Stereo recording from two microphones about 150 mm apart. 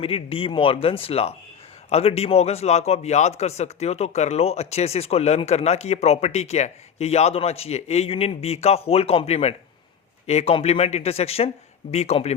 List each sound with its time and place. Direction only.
0.0 s a man's voice: 40° left (ahead or behind)